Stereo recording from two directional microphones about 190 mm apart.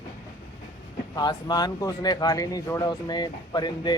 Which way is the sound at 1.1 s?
20° left (ahead or behind).